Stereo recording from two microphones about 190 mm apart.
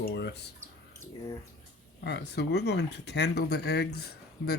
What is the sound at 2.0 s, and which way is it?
Speech, 60° left (ahead or behind).